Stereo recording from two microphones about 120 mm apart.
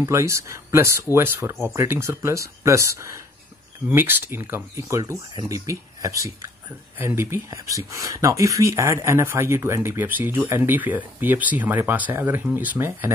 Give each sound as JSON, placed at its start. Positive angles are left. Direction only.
{"t": 0.0, "sound": "speech", "side_deg": -25}
{"t": 3.9, "sound": "speech", "side_deg": -15}